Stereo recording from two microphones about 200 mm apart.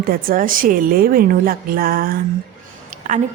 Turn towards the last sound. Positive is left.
turn(degrees=-40)  # may be behind; listen again after turning